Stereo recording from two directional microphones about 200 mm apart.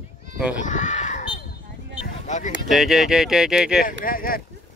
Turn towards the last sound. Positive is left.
turn(degrees=45)  # may be behind; listen again after turning